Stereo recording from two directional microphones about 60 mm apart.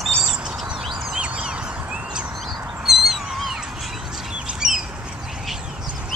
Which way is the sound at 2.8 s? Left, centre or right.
Centre.